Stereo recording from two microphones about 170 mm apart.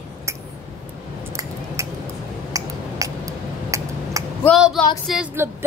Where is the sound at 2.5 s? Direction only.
20° right (ahead or behind).